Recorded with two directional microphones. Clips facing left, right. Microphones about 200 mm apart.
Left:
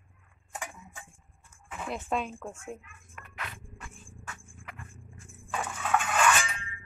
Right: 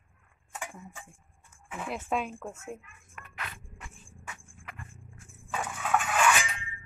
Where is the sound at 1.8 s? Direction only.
5° right (ahead or behind).